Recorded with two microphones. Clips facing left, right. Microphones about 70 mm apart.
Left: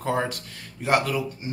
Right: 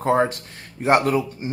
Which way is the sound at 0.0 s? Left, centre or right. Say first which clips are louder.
Right 7 dB; right.